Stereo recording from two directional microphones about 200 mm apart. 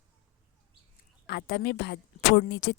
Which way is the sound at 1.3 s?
55° left (ahead or behind).